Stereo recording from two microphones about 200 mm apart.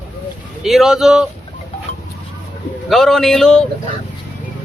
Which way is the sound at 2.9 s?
Centre (ahead or behind).